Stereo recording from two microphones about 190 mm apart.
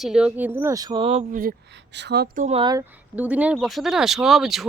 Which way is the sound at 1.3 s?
50° right (ahead or behind).